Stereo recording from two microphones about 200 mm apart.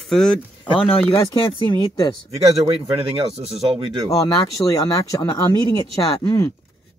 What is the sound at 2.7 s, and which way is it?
Speech, 30° right (ahead or behind).